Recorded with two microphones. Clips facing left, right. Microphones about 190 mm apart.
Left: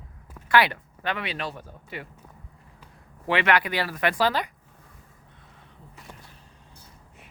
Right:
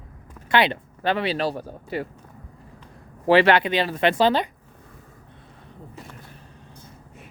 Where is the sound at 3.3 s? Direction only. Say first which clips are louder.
Right 7 dB; 30° right (ahead or behind).